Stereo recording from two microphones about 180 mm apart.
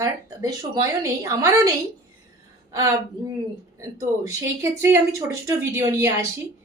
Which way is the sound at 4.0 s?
15° right (ahead or behind).